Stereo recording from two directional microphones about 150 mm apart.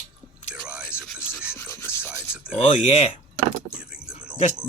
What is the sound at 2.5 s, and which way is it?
Speech, 45° left (ahead or behind).